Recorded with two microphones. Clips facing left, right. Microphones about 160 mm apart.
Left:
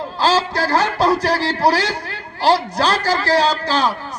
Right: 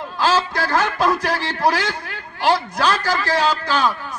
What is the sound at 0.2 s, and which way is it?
A man's voice, 35° left (ahead or behind).